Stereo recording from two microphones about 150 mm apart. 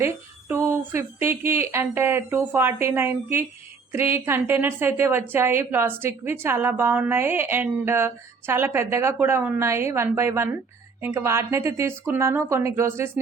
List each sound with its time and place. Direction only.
0.0 s a woman's voice: 15° right (ahead or behind)